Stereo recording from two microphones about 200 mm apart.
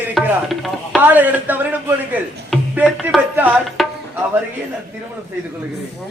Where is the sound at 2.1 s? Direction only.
10° right (ahead or behind).